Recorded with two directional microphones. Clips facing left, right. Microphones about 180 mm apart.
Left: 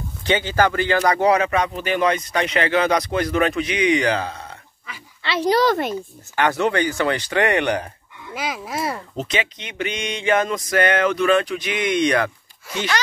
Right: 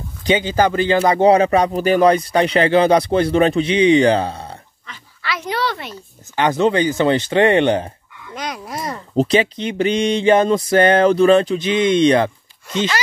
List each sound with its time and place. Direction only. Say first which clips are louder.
0.2 s speech: right 3 dB; 15° right (ahead or behind); by 4.6 s 30° right (ahead or behind)
4.9 s a sound: left 1 dB; 10° left (ahead or behind)
5.2 s speech: left 5 dB; 30° left (ahead or behind); by 5.9 s 45° left (ahead or behind)
6.3 s speech: right 4 dB; 20° right (ahead or behind)
8.4 s speech: left 1 dB; 5° left (ahead or behind)
9.1 s speech: right 10 dB; 35° right (ahead or behind)